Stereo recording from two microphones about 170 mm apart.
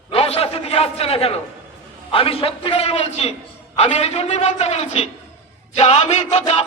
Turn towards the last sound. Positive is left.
turn(degrees=40)  # may be behind; listen again after turning